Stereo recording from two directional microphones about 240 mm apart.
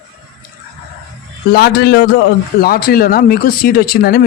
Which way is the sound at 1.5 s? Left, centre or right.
Left.